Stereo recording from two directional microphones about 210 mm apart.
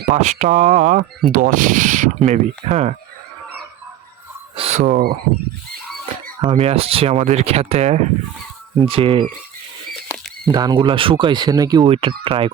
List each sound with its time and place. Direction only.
0.1 s speech: 35° right (ahead or behind)
4.5 s speech: 30° right (ahead or behind)
6.4 s speech: 25° right (ahead or behind)
9.9 s rodents: centre (ahead or behind)
10.5 s speech: 20° right (ahead or behind)